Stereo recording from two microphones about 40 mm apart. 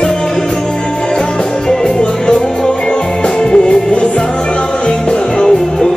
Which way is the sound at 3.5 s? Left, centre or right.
Left.